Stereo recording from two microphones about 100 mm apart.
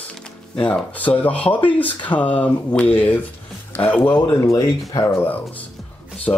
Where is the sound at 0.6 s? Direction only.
15° left (ahead or behind).